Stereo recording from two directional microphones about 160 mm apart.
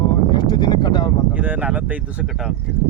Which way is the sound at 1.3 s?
10° right (ahead or behind).